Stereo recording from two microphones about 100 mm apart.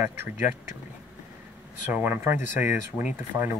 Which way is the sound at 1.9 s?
20° right (ahead or behind).